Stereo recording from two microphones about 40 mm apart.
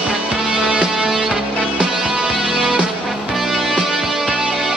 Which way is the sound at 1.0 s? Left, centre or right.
Centre.